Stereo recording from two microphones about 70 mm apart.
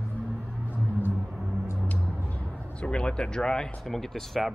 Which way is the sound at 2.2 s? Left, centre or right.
Left.